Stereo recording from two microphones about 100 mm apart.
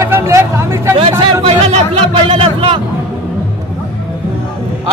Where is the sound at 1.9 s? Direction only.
75° right (ahead or behind).